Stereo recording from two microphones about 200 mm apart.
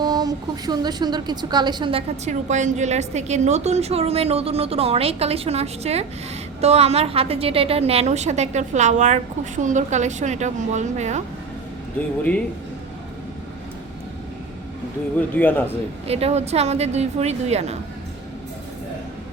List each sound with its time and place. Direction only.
0.0 s a woman's voice: 20° right (ahead or behind); by 11.2 s 35° right (ahead or behind)
11.9 s speech: 10° left (ahead or behind)
15.4 s speech: 10° left (ahead or behind)
16.0 s a woman's voice: 30° right (ahead or behind)